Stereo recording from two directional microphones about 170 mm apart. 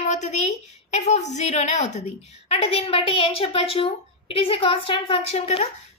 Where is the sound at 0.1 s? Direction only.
40° left (ahead or behind).